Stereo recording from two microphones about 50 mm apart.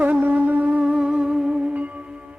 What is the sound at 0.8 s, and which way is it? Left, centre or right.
Music, centre.